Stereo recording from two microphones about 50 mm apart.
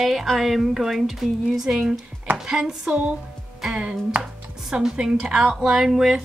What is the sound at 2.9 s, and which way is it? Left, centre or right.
A woman's voice, right.